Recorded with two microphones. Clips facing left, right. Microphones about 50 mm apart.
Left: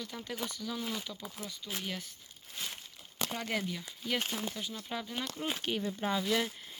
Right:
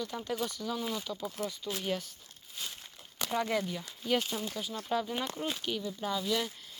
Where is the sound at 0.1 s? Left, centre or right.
Centre.